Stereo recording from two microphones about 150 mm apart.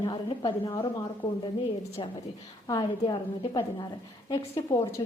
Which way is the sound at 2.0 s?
35° left (ahead or behind).